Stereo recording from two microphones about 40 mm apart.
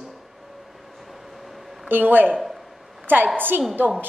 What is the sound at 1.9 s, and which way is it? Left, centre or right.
Speech, right.